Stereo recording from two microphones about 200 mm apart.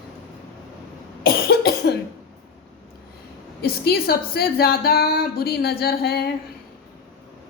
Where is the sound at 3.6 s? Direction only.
50° left (ahead or behind).